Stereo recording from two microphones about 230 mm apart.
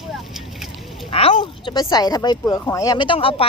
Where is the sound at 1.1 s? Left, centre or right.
Left.